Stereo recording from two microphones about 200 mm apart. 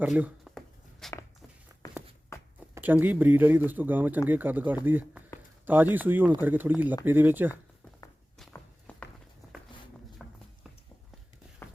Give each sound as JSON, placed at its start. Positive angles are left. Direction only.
{"t": 0.0, "sound": "a sound", "side_deg": -5}
{"t": 2.7, "sound": "speech", "side_deg": -10}
{"t": 8.5, "sound": "walk", "side_deg": 5}
{"t": 10.2, "sound": "music", "side_deg": 0}